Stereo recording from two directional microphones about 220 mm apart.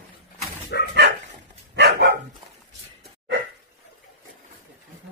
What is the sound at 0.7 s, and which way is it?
Bow-wow, 50° left (ahead or behind).